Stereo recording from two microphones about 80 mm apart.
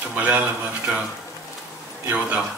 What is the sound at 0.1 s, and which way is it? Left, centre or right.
Speech, centre.